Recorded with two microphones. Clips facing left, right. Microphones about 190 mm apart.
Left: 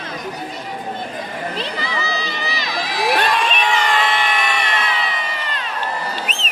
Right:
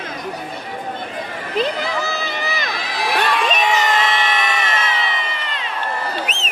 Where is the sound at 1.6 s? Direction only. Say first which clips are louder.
Right 5 dB; 50° right (ahead or behind).